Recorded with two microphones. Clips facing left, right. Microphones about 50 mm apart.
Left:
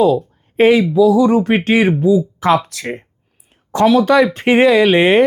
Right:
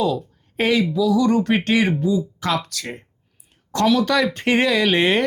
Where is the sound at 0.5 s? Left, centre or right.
Left.